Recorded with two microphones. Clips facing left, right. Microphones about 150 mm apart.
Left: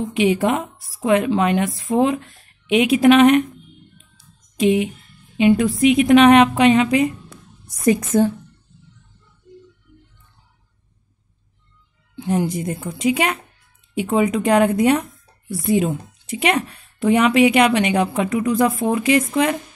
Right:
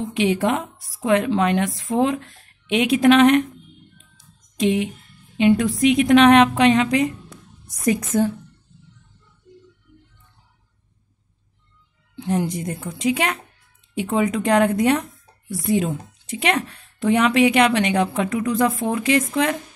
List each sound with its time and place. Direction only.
0.1 s a woman's voice: 5° left (ahead or behind)
4.2 s a sound: 5° left (ahead or behind)
5.4 s a woman's voice: 5° left (ahead or behind)
7.6 s a woman's voice: 30° left (ahead or behind)
12.2 s a woman's voice: 5° left (ahead or behind)